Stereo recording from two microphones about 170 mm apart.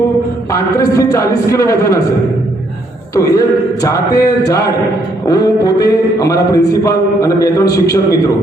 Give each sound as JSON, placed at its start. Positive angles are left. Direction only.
{"t": 0.5, "sound": "a man's voice", "side_deg": 20}
{"t": 3.2, "sound": "a man's voice", "side_deg": 20}
{"t": 7.6, "sound": "a man's voice", "side_deg": 70}